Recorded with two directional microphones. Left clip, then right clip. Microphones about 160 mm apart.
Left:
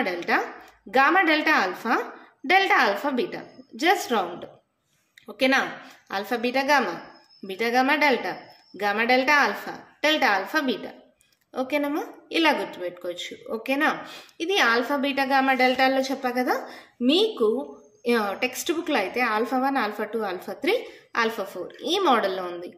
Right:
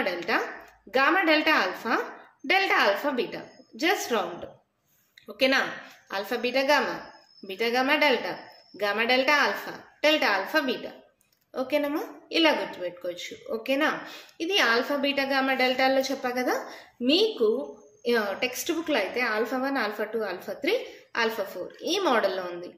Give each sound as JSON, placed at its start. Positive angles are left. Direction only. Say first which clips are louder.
{"t": 0.0, "sound": "a woman's voice", "louder": "left 2 dB", "side_deg": 30}